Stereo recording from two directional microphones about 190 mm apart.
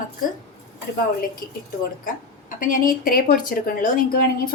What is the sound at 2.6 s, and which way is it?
A woman's voice, 45° left (ahead or behind).